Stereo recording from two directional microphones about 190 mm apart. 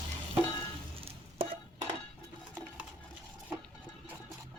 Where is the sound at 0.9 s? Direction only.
30° right (ahead or behind).